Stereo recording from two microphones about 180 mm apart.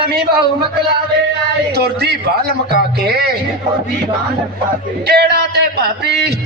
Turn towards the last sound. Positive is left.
turn(degrees=-65)  # may be behind; listen again after turning